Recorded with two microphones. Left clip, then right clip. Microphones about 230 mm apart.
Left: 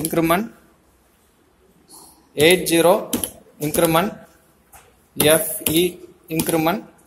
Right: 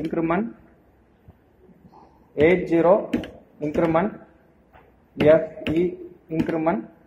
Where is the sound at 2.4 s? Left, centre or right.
Left.